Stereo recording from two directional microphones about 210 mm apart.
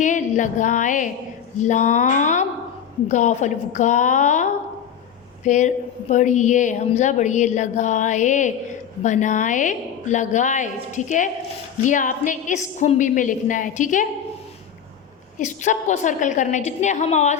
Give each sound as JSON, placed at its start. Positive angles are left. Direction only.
{"t": 0.0, "sound": "speech", "side_deg": 35}
{"t": 5.5, "sound": "speech", "side_deg": 35}
{"t": 15.4, "sound": "speech", "side_deg": 35}